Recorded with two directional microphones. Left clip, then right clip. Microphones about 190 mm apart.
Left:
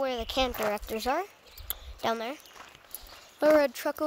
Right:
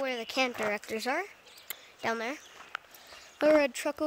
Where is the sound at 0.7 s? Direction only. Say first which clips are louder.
Left 2 dB; centre (ahead or behind).